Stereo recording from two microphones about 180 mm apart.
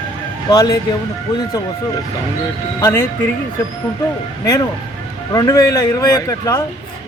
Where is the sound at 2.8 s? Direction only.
15° left (ahead or behind).